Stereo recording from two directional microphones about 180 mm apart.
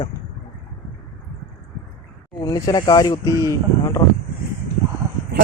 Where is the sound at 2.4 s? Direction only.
20° left (ahead or behind).